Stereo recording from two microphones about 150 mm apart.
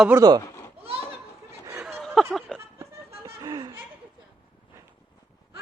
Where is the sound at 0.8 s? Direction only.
40° right (ahead or behind).